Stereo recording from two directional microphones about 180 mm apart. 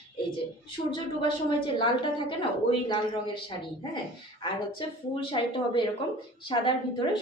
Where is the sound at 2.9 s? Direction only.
25° left (ahead or behind).